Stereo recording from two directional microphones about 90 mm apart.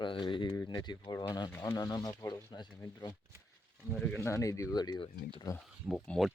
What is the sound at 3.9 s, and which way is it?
Speech, 10° left (ahead or behind).